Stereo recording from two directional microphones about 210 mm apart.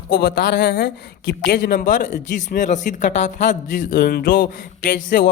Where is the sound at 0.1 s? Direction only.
55° left (ahead or behind).